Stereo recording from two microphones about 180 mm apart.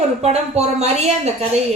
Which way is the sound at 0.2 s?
35° right (ahead or behind).